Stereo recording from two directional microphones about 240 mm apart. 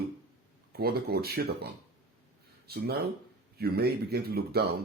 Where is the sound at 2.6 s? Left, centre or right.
Right.